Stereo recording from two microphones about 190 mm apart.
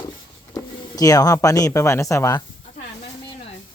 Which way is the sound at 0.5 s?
20° left (ahead or behind).